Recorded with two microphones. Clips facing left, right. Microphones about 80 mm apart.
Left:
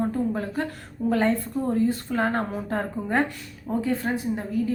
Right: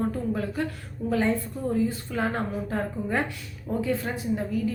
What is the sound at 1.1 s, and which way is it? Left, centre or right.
A woman's voice, left.